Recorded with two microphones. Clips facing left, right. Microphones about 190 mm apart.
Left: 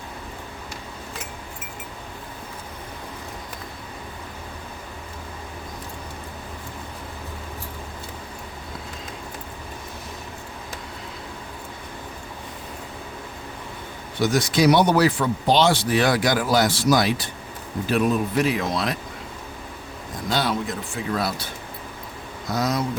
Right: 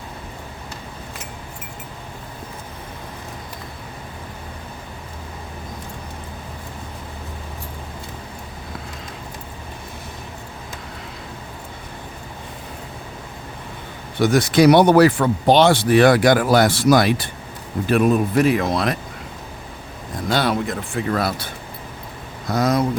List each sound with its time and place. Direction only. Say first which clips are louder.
14.2 s speech: right 5 dB; 55° right (ahead or behind)
20.3 s speech: right 4 dB; 60° right (ahead or behind)